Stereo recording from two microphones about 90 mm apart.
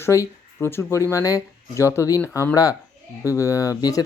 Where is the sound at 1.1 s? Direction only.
40° left (ahead or behind).